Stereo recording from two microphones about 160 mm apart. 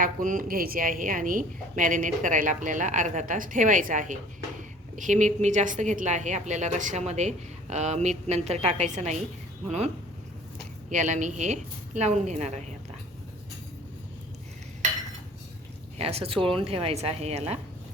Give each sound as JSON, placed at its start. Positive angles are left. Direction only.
{"t": 0.0, "sound": "a woman's voice", "side_deg": -55}
{"t": 16.0, "sound": "a woman's voice", "side_deg": -40}